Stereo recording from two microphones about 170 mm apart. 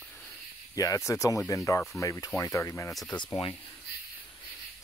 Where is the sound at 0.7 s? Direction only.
20° left (ahead or behind).